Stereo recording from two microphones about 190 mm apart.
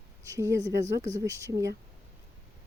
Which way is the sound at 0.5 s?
70° right (ahead or behind).